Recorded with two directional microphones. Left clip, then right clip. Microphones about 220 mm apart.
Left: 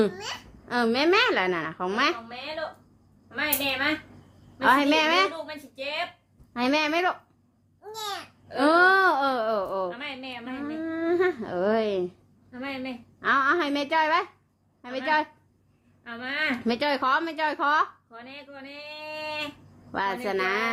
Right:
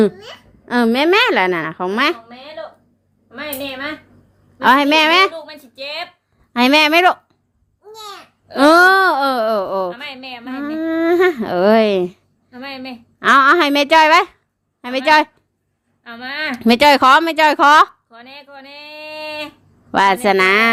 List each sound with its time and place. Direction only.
0.7 s speech: 30° right (ahead or behind)
7.9 s babbling: 10° left (ahead or behind)
8.4 s speech: 30° right (ahead or behind)
9.9 s speech: 45° right (ahead or behind)